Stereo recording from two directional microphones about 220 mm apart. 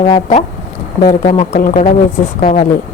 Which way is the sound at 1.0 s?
40° left (ahead or behind).